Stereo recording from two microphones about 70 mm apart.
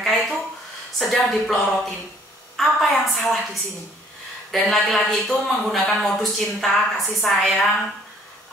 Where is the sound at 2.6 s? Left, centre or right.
Centre.